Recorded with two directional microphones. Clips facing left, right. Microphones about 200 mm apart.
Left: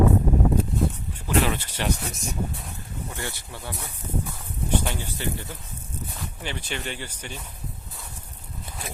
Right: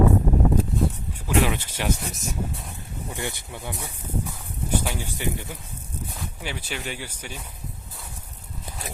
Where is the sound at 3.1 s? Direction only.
15° right (ahead or behind).